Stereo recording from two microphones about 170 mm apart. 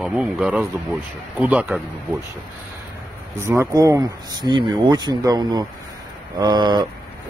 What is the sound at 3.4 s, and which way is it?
Speech, 15° right (ahead or behind).